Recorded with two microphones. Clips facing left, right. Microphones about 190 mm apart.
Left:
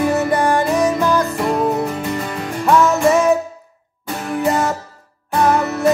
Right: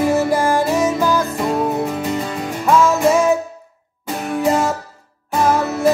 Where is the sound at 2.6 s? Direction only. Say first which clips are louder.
Even; centre (ahead or behind).